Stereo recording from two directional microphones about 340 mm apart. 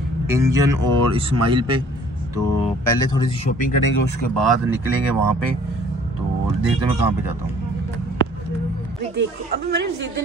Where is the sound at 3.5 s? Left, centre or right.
Left.